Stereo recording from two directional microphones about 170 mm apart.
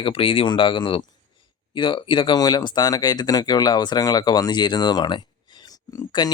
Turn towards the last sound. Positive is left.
turn(degrees=25)  # may be behind; listen again after turning